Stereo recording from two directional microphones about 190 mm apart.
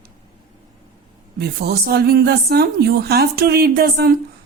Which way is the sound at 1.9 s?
55° right (ahead or behind).